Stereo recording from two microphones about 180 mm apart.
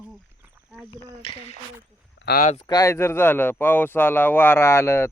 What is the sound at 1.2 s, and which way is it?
Speech, 30° left (ahead or behind).